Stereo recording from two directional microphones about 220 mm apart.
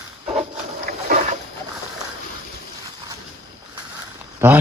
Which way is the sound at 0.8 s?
45° right (ahead or behind).